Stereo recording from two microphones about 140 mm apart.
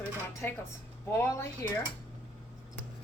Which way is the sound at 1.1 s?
20° left (ahead or behind).